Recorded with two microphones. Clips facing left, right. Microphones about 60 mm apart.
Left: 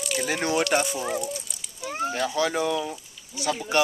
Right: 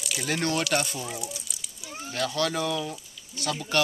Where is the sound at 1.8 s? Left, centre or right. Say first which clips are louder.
Left 12 dB; left.